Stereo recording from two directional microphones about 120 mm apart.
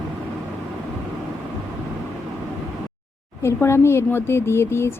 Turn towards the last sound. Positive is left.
turn(degrees=20)  # may be behind; listen again after turning